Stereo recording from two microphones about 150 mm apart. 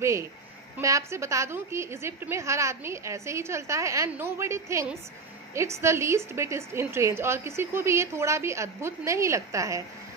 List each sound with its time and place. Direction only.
0.0 s a woman's voice: 20° right (ahead or behind)